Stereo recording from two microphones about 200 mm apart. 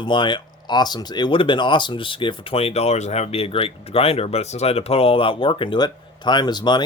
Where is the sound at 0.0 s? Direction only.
25° left (ahead or behind).